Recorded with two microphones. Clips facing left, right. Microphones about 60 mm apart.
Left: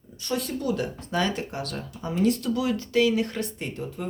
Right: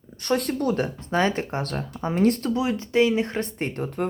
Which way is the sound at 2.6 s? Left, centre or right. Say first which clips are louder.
Right 2 dB; right.